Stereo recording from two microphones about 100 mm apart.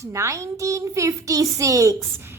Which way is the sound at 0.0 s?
30° right (ahead or behind).